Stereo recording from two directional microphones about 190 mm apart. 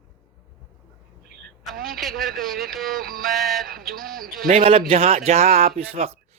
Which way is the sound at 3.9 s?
50° right (ahead or behind).